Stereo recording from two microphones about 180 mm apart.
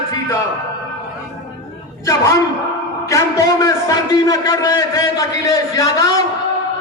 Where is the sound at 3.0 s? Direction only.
15° left (ahead or behind).